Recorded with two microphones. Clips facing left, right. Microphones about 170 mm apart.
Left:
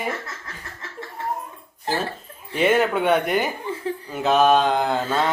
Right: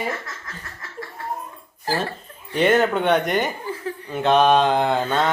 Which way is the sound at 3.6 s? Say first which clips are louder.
Left 1 dB; 25° left (ahead or behind).